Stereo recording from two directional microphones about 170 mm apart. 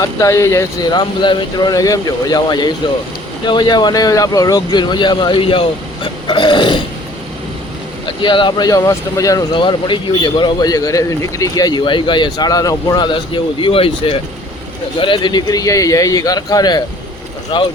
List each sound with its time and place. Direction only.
0.0 s speech: 20° left (ahead or behind)
8.0 s speech: 25° left (ahead or behind)